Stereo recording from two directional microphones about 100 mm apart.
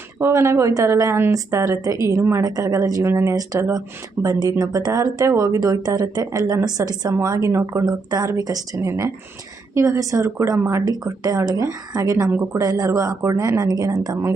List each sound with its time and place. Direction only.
0.2 s speech: 25° right (ahead or behind)
3.1 s speech: 25° right (ahead or behind)
3.3 s speech: 35° right (ahead or behind)
7.9 s speech: 40° right (ahead or behind); by 10.8 s 25° right (ahead or behind)
10.8 s speech: 40° right (ahead or behind)